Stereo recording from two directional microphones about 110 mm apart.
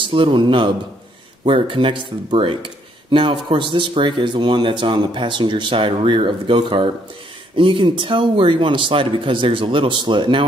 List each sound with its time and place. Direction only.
0.0 s speech: 50° right (ahead or behind)